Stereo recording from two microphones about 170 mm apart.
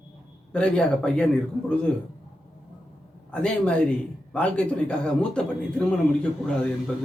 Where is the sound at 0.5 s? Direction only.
5° left (ahead or behind).